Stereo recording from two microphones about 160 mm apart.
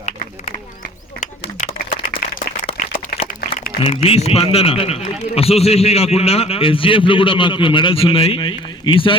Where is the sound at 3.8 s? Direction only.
35° left (ahead or behind).